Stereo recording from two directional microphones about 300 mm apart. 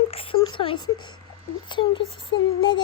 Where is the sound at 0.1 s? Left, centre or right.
Centre.